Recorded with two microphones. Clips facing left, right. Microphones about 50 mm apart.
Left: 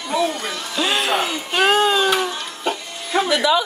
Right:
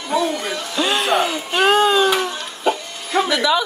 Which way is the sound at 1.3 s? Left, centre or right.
Centre.